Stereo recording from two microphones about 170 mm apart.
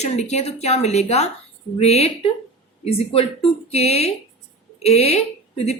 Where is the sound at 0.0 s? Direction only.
40° left (ahead or behind).